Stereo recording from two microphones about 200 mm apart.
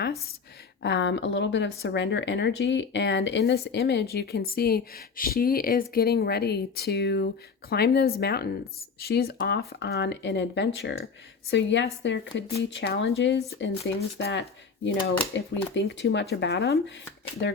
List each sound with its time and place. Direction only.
0.8 s speech: 60° left (ahead or behind)